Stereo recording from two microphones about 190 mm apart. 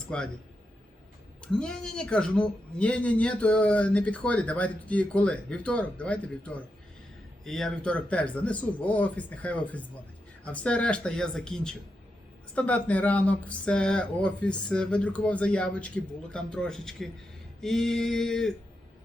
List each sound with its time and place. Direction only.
0.1 s speech: 5° left (ahead or behind)
1.5 s speech: 5° left (ahead or behind)